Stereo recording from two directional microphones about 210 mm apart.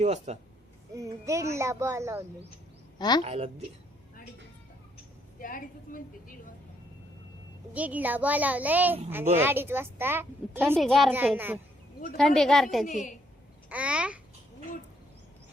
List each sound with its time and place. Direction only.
0.0 s speech: 30° right (ahead or behind)
0.9 s speech: 15° right (ahead or behind)
3.0 s a woman's voice: 20° left (ahead or behind)
3.2 s a woman's voice: 30° right (ahead or behind)
5.4 s a woman's voice: 40° left (ahead or behind)
7.7 s speech: 5° right (ahead or behind)
10.8 s a child's voice: centre (ahead or behind)
12.1 s a child's voice: centre (ahead or behind)
12.8 s a woman's voice: 35° left (ahead or behind)
13.7 s a child's voice: 5° right (ahead or behind)